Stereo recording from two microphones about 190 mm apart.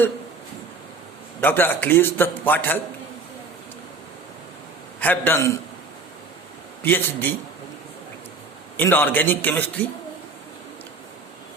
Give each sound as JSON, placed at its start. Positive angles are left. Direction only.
{"t": 1.4, "sound": "a man's voice", "side_deg": 10}
{"t": 4.9, "sound": "a man's voice", "side_deg": 10}
{"t": 6.8, "sound": "a man's voice", "side_deg": 10}
{"t": 8.8, "sound": "a man's voice", "side_deg": 10}